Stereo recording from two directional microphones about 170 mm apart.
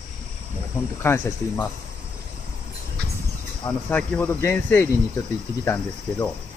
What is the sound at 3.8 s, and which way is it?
Speech, 10° left (ahead or behind).